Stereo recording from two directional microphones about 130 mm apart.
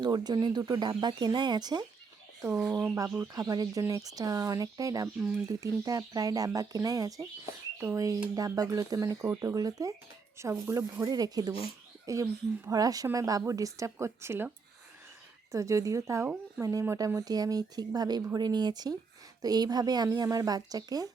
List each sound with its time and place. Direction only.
0.0 s speech: 35° right (ahead or behind)
2.8 s speech: 20° right (ahead or behind)
15.5 s speech: 25° right (ahead or behind)